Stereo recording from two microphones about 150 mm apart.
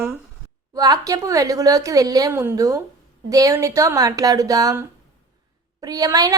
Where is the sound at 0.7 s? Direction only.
25° right (ahead or behind).